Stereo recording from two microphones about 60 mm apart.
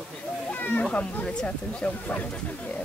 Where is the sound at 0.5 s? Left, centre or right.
Left.